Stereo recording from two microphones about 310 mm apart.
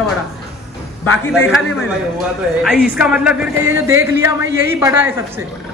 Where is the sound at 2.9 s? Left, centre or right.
Centre.